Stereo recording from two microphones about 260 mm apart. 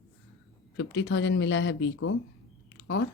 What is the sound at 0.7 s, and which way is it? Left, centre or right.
A woman's voice, left.